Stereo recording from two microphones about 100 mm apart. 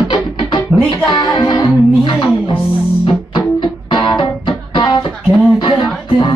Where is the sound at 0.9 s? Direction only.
40° left (ahead or behind).